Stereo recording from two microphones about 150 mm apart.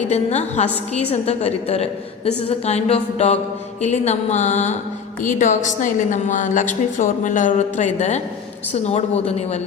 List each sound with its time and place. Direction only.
0.1 s a woman's voice: 45° left (ahead or behind)